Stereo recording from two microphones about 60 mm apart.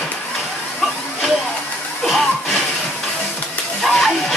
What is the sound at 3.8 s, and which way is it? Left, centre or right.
Hiss, centre.